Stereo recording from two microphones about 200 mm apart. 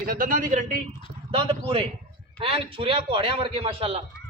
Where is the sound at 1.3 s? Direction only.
30° right (ahead or behind).